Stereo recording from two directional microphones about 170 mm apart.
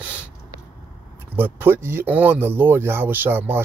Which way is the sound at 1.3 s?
10° right (ahead or behind).